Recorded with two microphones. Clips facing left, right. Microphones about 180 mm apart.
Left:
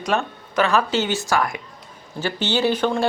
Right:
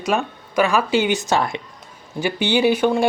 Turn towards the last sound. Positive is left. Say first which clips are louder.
# right 3 dB
turn(degrees=-10)  # may be behind; listen again after turning